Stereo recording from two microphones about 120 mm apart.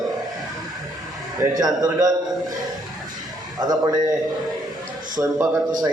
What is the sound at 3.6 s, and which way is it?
A man's voice, 30° right (ahead or behind).